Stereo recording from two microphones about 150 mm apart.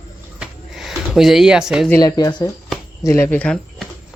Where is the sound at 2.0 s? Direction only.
30° left (ahead or behind).